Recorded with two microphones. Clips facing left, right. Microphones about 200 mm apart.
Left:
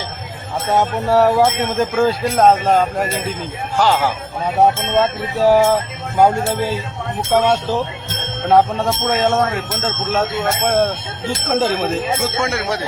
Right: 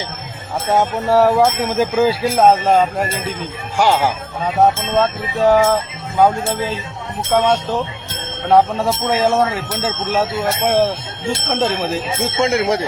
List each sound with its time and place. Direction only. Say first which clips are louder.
0.7 s speech: right 1 dB; centre (ahead or behind)
3.8 s speech: right 1 dB; 15° right (ahead or behind)
4.4 s speech: even; 5° left (ahead or behind)
12.2 s speech: right 4 dB; 20° right (ahead or behind)